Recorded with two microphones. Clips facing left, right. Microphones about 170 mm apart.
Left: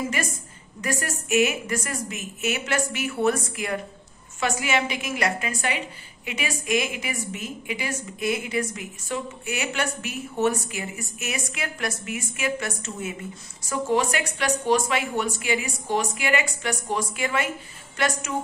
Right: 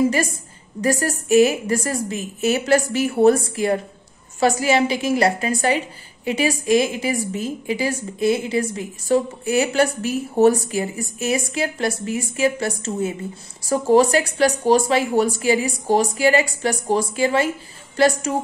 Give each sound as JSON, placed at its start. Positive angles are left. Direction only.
{"t": 0.7, "sound": "a woman's voice", "side_deg": -35}